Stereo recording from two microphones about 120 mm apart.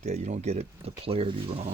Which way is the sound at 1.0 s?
55° right (ahead or behind).